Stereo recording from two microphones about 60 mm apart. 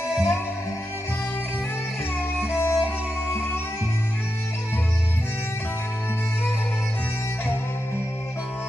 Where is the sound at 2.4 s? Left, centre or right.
Left.